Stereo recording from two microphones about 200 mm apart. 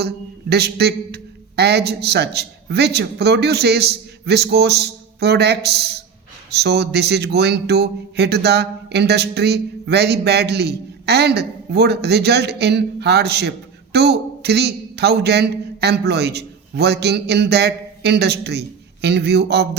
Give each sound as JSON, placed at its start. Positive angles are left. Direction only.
{"t": 0.5, "sound": "a man's voice", "side_deg": -55}